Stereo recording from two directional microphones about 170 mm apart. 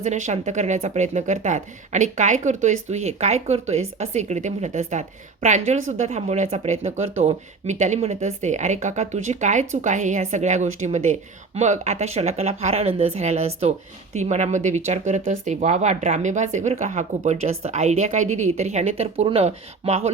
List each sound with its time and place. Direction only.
0.0 s speech: 45° right (ahead or behind)